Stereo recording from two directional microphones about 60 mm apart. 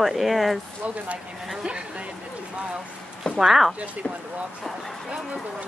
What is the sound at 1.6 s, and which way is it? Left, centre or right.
Speech, centre.